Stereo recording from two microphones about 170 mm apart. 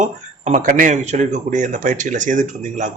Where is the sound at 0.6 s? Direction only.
50° right (ahead or behind).